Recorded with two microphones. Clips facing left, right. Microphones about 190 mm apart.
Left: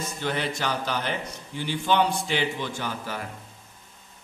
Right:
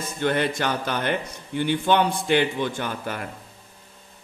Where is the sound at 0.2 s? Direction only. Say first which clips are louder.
Right 6 dB; 55° right (ahead or behind).